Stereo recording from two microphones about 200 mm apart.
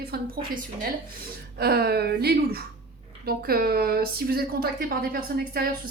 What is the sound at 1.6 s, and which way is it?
Speech, 50° right (ahead or behind).